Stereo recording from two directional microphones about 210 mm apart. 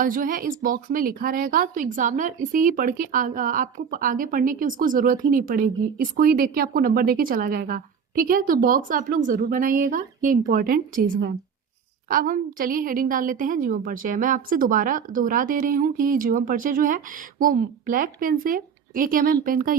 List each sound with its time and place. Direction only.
0.0 s a woman's voice: 40° right (ahead or behind)